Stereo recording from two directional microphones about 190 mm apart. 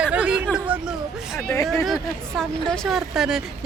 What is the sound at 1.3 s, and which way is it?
Speech, 15° left (ahead or behind).